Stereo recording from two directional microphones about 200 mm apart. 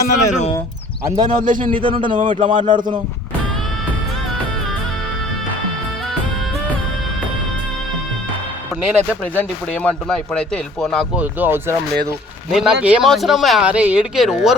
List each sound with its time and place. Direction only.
0.0 s speech: 35° left (ahead or behind)
1.0 s speech: 20° right (ahead or behind)
1.4 s speech: 40° right (ahead or behind)
1.7 s speech: 25° right (ahead or behind)
2.0 s speech: 40° right (ahead or behind)
2.6 s speech: 25° right (ahead or behind)
9.3 s speech: 5° left (ahead or behind)